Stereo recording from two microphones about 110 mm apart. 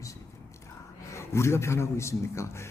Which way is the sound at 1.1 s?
25° left (ahead or behind).